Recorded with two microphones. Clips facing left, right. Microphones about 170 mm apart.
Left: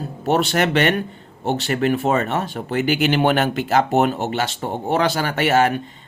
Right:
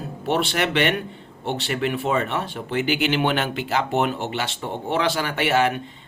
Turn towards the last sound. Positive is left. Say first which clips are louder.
# left 3 dB
turn(degrees=45)  # may be behind; listen again after turning